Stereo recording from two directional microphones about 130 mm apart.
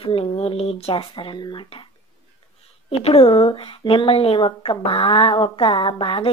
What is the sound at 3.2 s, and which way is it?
Speech, 40° left (ahead or behind).